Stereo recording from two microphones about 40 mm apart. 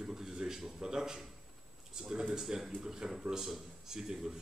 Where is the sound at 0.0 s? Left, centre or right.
Centre.